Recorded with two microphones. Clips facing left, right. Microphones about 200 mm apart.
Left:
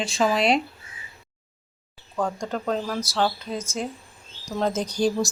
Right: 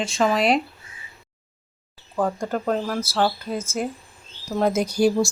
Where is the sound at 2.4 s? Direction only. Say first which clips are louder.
Right 3 dB; 5° right (ahead or behind).